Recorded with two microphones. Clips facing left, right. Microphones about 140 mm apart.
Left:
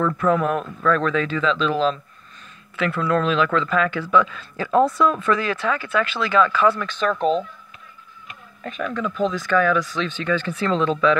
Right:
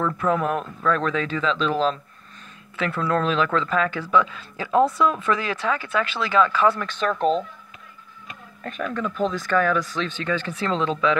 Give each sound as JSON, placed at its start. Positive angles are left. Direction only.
{"t": 0.0, "sound": "speech", "side_deg": -20}
{"t": 5.6, "sound": "speech", "side_deg": -30}
{"t": 6.8, "sound": "speech", "side_deg": -40}
{"t": 8.8, "sound": "speech", "side_deg": -35}
{"t": 9.2, "sound": "speech", "side_deg": -50}